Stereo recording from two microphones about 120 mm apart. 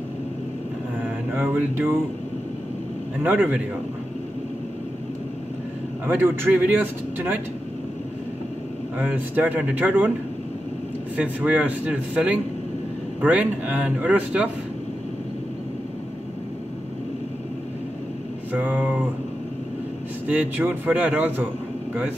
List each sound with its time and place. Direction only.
1.3 s music: 20° right (ahead or behind)
3.2 s speech: 15° right (ahead or behind)
6.0 s speech: 20° right (ahead or behind)
8.9 s speech: 15° right (ahead or behind)
11.1 s speech: 15° right (ahead or behind)
18.5 s speech: 15° right (ahead or behind)
20.2 s speech: 15° right (ahead or behind)